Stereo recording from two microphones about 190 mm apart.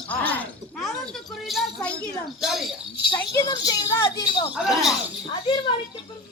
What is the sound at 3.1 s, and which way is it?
A woman's voice, 20° left (ahead or behind).